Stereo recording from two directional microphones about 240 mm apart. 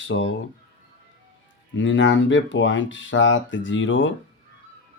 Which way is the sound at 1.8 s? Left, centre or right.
Left.